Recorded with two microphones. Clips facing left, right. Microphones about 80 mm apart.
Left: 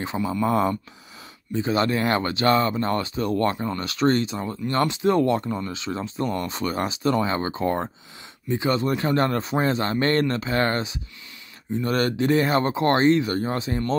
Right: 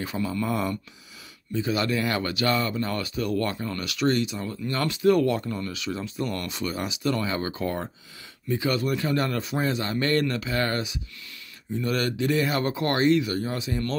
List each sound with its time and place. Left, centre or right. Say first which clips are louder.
0.0 s speech: left 3 dB; left
0.5 s speech: left 6 dB; left
6.5 s speech: left 4 dB; left